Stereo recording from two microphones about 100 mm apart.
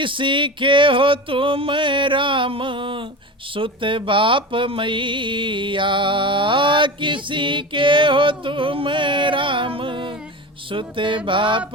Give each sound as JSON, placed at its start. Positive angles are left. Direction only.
{"t": 0.0, "sound": "speech", "side_deg": -55}